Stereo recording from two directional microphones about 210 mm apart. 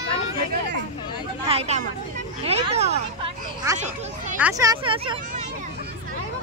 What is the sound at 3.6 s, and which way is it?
Speech, 15° right (ahead or behind).